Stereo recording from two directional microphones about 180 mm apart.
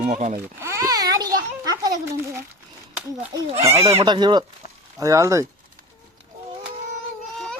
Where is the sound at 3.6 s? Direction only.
15° right (ahead or behind).